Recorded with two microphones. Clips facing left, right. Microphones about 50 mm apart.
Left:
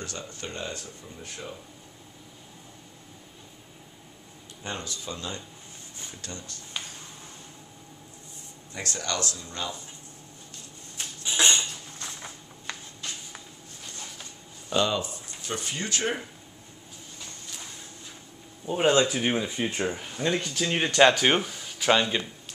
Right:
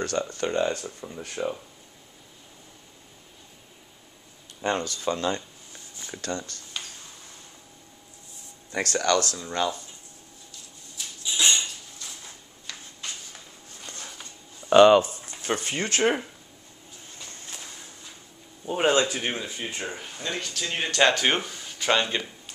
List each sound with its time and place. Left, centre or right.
0.0 s speech: right
4.6 s speech: right
6.2 s speech: right
8.7 s speech: right
9.4 s speech: right
10.5 s a sound: left
12.7 s a sound: left
14.7 s a sound: right
15.4 s speech: right
18.7 s speech: centre
19.0 s speech: centre
19.9 s speech: centre